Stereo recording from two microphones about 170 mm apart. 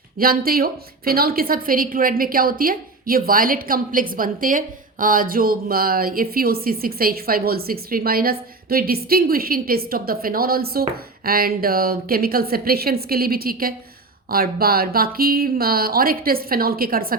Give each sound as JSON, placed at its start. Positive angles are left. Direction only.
{"t": 0.2, "sound": "a woman's voice", "side_deg": -60}